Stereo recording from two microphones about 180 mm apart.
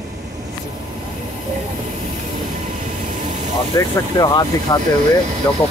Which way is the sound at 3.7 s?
20° left (ahead or behind).